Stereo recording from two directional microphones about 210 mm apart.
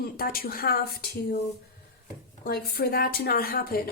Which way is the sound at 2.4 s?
45° left (ahead or behind).